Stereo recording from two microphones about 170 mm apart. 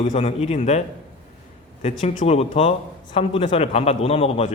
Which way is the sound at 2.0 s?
40° left (ahead or behind).